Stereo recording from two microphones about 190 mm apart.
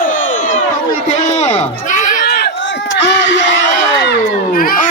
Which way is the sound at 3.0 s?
75° left (ahead or behind).